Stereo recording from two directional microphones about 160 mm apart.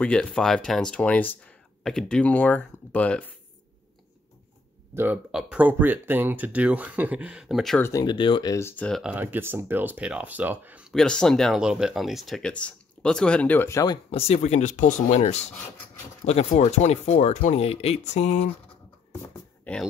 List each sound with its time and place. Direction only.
0.0 s speech: 5° left (ahead or behind)
4.9 s speech: 10° right (ahead or behind)
7.8 s speech: 20° left (ahead or behind)
9.0 s speech: 10° right (ahead or behind)
10.9 s speech: 5° left (ahead or behind)
14.1 s speech: 40° left (ahead or behind)
19.6 s speech: 5° left (ahead or behind)